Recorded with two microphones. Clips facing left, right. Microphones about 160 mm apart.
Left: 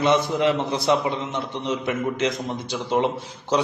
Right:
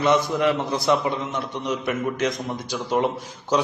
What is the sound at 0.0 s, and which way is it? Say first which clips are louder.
A man's voice: even; 25° left (ahead or behind).